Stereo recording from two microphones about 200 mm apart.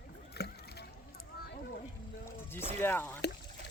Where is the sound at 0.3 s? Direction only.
55° left (ahead or behind).